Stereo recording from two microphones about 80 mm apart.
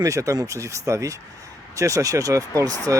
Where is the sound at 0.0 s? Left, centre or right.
Right.